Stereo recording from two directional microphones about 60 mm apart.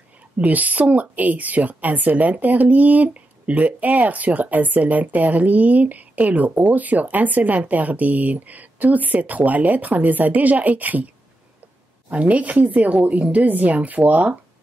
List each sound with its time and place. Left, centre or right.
0.4 s a woman's voice: right
12.1 s a woman's voice: right